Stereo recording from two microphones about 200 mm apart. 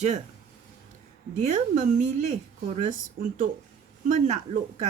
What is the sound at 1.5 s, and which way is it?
Speech, 35° right (ahead or behind).